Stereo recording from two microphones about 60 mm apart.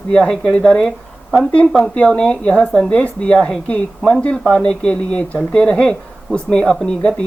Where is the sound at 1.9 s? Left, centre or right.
Centre.